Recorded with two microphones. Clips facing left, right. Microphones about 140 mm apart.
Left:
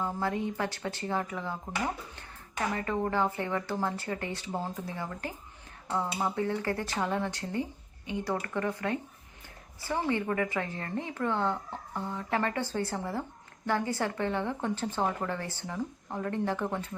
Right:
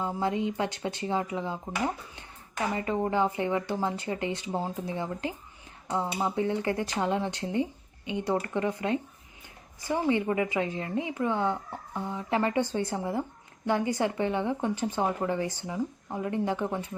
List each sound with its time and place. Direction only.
0.0 s speech: 20° right (ahead or behind)